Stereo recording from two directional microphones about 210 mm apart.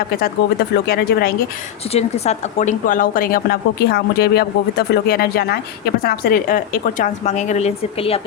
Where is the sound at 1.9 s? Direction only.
30° left (ahead or behind).